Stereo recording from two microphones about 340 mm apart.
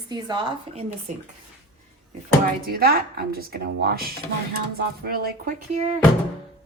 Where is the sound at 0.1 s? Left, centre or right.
Centre.